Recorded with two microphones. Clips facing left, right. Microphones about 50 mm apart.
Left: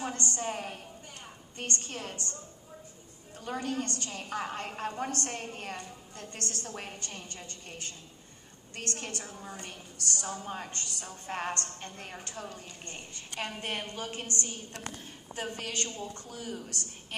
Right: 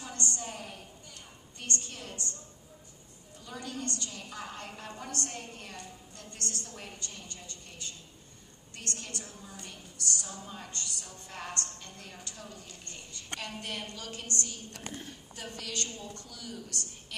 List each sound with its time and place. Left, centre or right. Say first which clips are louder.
0.3 s a woman's voice: left 5 dB; left
3.4 s a woman's voice: left 5 dB; left